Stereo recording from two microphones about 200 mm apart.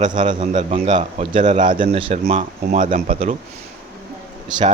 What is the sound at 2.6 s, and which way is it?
Speech, 40° right (ahead or behind).